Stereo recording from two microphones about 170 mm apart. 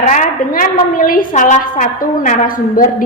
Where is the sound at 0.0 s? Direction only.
45° left (ahead or behind).